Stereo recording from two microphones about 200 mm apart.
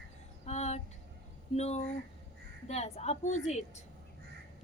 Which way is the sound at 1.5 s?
35° left (ahead or behind).